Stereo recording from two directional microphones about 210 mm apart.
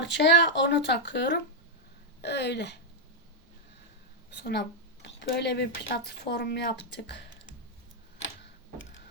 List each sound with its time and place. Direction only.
0.0 s speech: 55° left (ahead or behind)
5.0 s speech: 55° left (ahead or behind)